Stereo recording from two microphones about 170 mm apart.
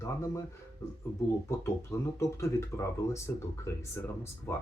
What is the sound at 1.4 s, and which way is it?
Speech, 15° left (ahead or behind).